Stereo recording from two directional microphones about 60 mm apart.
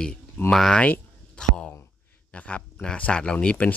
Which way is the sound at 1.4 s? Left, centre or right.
Centre.